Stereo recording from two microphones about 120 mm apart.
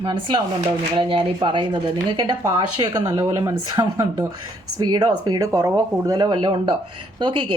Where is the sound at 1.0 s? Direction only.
45° right (ahead or behind).